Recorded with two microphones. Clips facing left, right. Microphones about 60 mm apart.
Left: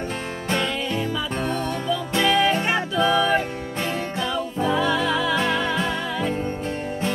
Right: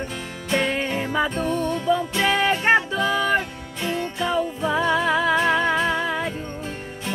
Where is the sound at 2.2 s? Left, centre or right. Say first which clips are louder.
Even; right.